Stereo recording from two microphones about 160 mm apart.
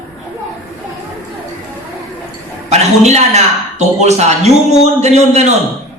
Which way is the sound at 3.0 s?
45° right (ahead or behind).